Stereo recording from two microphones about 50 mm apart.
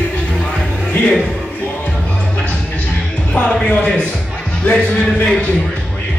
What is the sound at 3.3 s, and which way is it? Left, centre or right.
A man's voice, left.